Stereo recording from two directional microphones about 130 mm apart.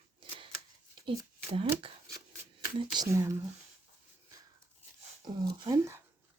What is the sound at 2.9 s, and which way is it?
Speech, 25° right (ahead or behind).